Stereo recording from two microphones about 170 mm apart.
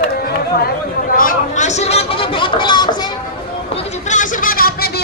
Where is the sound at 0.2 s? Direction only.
65° left (ahead or behind); by 3.1 s 25° left (ahead or behind).